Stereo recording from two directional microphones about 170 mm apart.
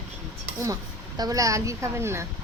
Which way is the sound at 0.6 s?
20° right (ahead or behind).